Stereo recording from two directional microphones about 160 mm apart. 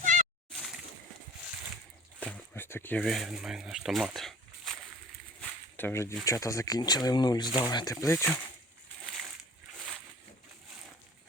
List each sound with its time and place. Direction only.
0.0 s a sound: 50° right (ahead or behind)
2.2 s speech: 10° left (ahead or behind)
5.7 s speech: 15° left (ahead or behind)
9.0 s slosh: centre (ahead or behind)